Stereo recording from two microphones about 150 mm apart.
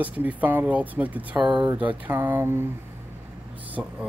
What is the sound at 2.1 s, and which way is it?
Speech, 15° right (ahead or behind).